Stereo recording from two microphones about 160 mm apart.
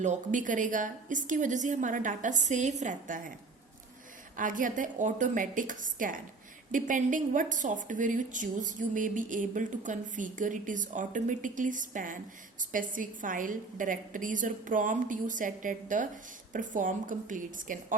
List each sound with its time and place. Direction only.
0.0 s a woman's voice: 50° right (ahead or behind)
4.4 s a woman's voice: 55° right (ahead or behind)